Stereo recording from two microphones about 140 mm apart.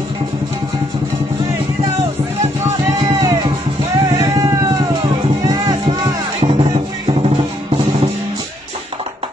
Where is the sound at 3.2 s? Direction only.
25° right (ahead or behind).